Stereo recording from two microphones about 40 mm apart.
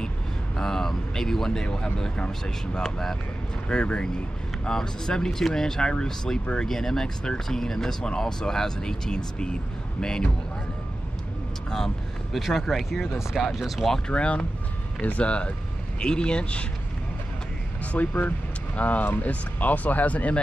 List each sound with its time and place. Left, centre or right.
0.6 s speech: centre
3.6 s speech: left
12.3 s speech: centre
14.1 s speech: left
17.9 s speech: left